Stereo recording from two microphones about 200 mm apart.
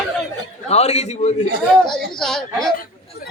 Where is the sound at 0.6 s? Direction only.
30° left (ahead or behind).